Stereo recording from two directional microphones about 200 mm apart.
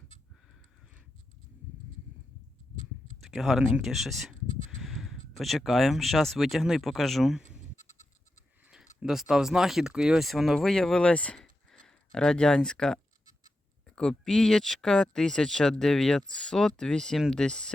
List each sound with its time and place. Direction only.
3.2 s speech: centre (ahead or behind)
7.8 s goat: 35° left (ahead or behind)
9.0 s speech: 5° right (ahead or behind)